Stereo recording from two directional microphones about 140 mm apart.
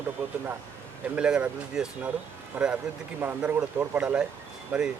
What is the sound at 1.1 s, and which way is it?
Speech, 10° right (ahead or behind).